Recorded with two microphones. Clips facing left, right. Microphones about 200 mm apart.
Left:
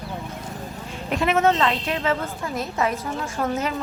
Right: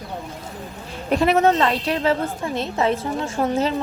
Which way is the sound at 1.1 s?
35° right (ahead or behind).